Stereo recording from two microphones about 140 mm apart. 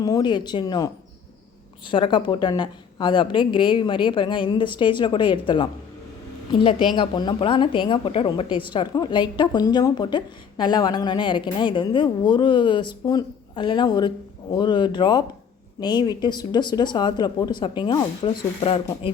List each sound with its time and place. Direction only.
0.0 s a woman's voice: 30° left (ahead or behind)
1.9 s a woman's voice: 35° left (ahead or behind)